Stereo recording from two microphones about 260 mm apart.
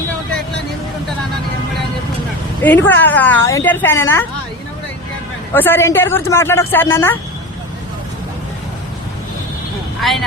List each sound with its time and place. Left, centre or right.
2.6 s speech: centre
5.5 s speech: centre
10.0 s speech: centre